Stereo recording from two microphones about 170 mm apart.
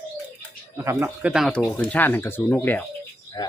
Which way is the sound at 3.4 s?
25° left (ahead or behind).